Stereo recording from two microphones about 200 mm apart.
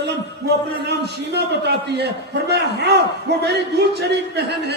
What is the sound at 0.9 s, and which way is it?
A man's voice, 55° right (ahead or behind).